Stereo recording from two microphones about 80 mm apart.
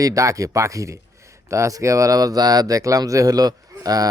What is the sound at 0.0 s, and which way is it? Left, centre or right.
Speech, right.